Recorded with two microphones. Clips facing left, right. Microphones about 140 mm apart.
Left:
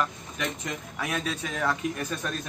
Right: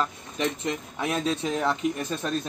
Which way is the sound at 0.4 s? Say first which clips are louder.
Right 5 dB; 25° right (ahead or behind).